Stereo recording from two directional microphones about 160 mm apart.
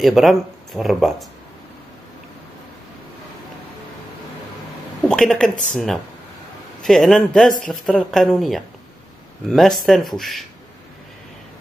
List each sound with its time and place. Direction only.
0.0 s speech: centre (ahead or behind)
5.0 s speech: 5° left (ahead or behind)